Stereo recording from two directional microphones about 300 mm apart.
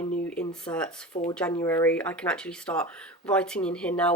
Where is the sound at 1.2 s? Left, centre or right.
Left.